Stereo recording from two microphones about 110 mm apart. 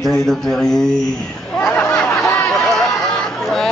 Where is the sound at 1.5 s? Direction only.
15° left (ahead or behind).